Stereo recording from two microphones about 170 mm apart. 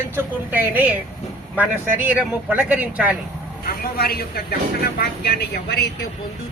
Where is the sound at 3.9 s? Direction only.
65° left (ahead or behind).